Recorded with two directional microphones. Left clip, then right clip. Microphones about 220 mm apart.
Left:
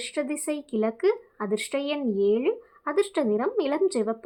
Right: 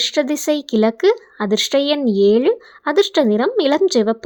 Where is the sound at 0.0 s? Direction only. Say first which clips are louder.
Right 12 dB; 35° right (ahead or behind).